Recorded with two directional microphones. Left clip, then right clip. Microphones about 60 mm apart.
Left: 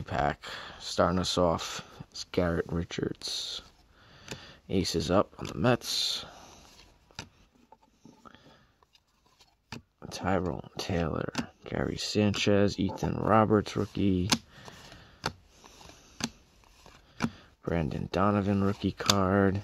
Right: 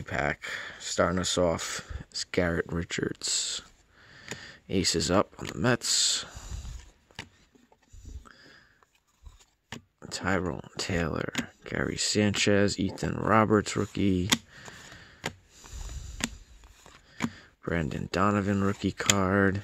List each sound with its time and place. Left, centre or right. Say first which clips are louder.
0.0 s speech: even; centre; by 5.4 s right
5.6 s speech: right 1 dB; centre
7.1 s a sound: right 1 dB; centre
9.9 s tick-tock: right 3 dB; centre
10.2 s speech: even; right
11.9 s speech: right 2 dB; right; by 13.3 s centre
13.3 s speech: right 1 dB; right
14.5 s a sound: right 3 dB; centre
15.6 s a sound: right 3 dB; right
17.6 s speech: right 1 dB; right
18.8 s speech: even; right